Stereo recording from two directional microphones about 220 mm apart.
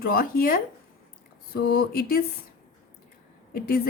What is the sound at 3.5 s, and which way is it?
Speech, 45° left (ahead or behind).